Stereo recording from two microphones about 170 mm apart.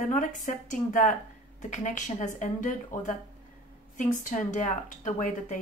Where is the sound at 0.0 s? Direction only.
50° left (ahead or behind).